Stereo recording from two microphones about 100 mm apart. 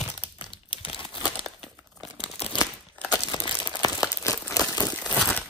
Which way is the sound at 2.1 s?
90° left.